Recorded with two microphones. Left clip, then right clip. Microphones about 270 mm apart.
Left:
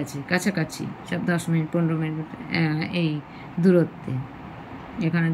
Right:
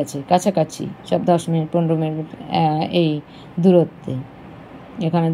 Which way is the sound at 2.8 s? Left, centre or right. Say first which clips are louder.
Right 9 dB; right.